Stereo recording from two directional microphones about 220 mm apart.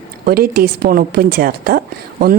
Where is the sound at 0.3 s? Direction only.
45° right (ahead or behind).